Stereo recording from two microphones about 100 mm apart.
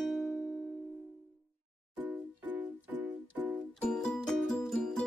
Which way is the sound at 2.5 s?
20° right (ahead or behind).